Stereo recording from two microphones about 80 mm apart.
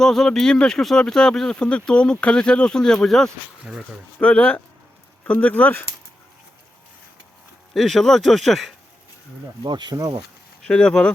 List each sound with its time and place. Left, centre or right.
0.0 s speech: centre
3.6 s speech: centre
4.2 s speech: centre
7.7 s speech: centre
9.6 s speech: right
10.6 s speech: centre